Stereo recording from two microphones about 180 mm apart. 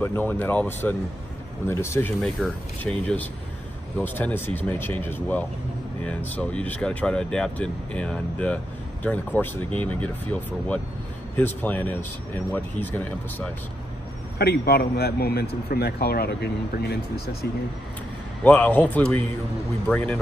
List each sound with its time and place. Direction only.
0.0 s speech: 10° left (ahead or behind)
14.4 s speech: 60° left (ahead or behind)
18.4 s speech: 10° left (ahead or behind)